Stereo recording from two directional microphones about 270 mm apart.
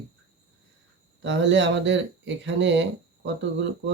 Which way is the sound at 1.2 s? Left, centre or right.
Right.